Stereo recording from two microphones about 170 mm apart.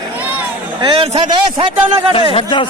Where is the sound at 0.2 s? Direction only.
10° right (ahead or behind).